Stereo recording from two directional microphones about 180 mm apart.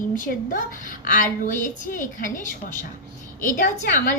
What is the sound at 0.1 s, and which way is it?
A woman's voice, 50° left (ahead or behind).